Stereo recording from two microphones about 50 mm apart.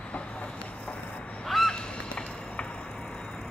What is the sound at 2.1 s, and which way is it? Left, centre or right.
Vehicle, left.